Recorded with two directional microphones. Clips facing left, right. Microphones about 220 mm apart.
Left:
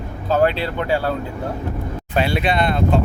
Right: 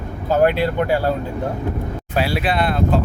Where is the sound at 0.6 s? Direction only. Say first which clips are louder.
Right 3 dB; 45° right (ahead or behind).